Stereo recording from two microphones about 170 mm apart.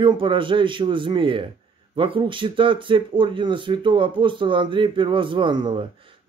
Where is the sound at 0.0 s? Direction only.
30° right (ahead or behind).